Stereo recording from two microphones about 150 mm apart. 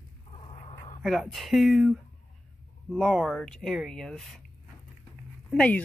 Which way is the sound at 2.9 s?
Centre (ahead or behind).